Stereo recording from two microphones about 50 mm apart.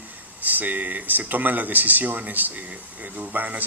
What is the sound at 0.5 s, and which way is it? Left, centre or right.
A man's voice, right.